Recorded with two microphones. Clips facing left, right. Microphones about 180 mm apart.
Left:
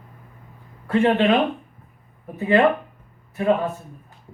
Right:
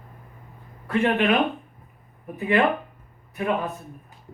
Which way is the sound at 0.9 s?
30° left (ahead or behind).